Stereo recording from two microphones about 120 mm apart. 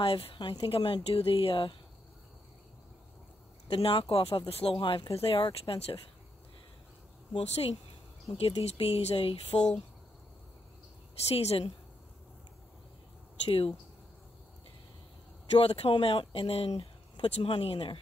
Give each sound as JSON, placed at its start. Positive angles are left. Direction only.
{"t": 0.0, "sound": "speech", "side_deg": 50}
{"t": 3.7, "sound": "speech", "side_deg": 50}
{"t": 7.3, "sound": "speech", "side_deg": 65}
{"t": 11.2, "sound": "speech", "side_deg": 55}
{"t": 15.5, "sound": "speech", "side_deg": 55}